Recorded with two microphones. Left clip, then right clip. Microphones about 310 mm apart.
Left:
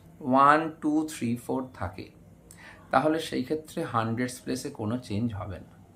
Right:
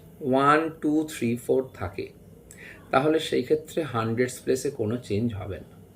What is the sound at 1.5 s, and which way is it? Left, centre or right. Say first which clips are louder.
Speech: right 7 dB; left.